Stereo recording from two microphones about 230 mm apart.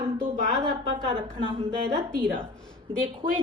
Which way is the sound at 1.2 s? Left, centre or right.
Centre.